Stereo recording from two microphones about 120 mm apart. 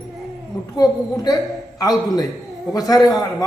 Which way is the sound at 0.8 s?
30° left (ahead or behind).